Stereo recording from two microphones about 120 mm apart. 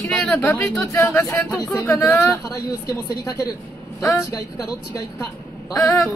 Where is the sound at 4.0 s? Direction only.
30° left (ahead or behind).